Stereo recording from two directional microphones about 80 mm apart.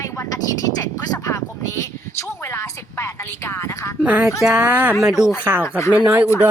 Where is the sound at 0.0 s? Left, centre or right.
Left.